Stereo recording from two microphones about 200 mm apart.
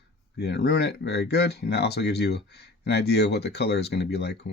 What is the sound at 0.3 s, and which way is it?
Speech, 55° left (ahead or behind).